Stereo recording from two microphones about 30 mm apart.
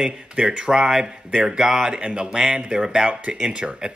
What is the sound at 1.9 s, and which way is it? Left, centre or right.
Speech, right.